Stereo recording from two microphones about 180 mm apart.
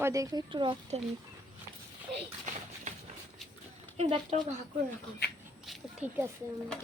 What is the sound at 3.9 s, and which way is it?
Speech, 35° right (ahead or behind).